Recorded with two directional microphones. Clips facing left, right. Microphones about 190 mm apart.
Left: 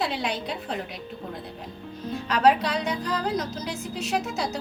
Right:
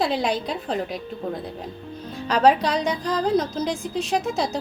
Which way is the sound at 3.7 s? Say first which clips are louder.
Right 5 dB; 5° left (ahead or behind).